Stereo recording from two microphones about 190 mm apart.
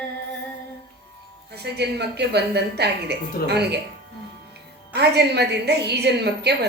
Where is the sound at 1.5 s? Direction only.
60° right (ahead or behind).